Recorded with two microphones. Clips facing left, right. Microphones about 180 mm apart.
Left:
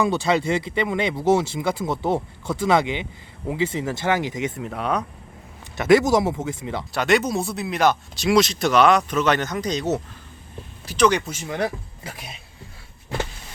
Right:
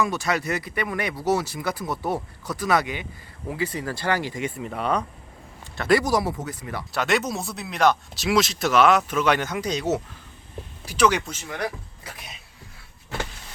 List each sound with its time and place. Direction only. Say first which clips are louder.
0.0 s speech: left 4 dB; 30° left (ahead or behind)
4.5 s speech: even; centre (ahead or behind)
5.7 s speech: left 4 dB; 15° left (ahead or behind)
6.9 s speech: left 4 dB; centre (ahead or behind)
11.4 s speech: left 7 dB; 25° left (ahead or behind)